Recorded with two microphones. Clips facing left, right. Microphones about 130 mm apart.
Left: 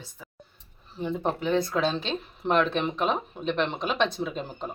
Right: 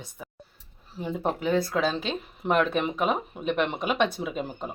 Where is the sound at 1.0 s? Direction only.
5° right (ahead or behind).